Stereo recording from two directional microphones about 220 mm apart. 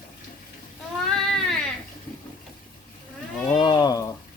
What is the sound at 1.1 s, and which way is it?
Sheep, centre (ahead or behind).